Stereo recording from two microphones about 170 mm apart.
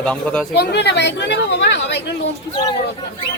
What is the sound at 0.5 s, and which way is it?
A woman's voice, 75° left (ahead or behind).